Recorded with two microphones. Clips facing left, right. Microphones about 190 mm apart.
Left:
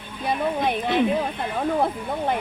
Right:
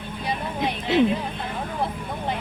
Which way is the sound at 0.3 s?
50° left (ahead or behind).